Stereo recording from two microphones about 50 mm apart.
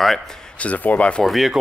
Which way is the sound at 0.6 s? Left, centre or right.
Left.